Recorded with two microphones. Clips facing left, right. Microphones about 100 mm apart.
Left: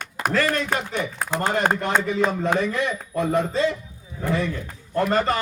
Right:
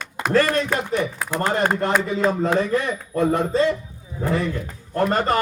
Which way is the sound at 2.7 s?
35° right (ahead or behind).